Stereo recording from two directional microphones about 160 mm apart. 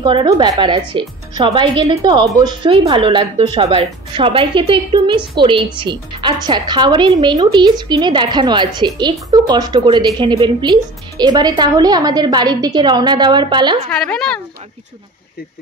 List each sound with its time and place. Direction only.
0.0 s a woman's voice: 30° right (ahead or behind)
13.8 s a woman's voice: 5° left (ahead or behind)